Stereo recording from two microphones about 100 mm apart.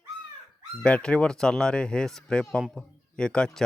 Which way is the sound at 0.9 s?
10° left (ahead or behind).